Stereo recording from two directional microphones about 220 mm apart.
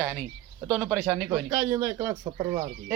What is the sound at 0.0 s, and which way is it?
Speech, 5° left (ahead or behind).